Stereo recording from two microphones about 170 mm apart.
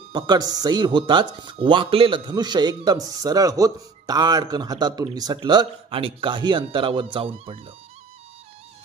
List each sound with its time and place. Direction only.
0.1 s speech: 25° right (ahead or behind)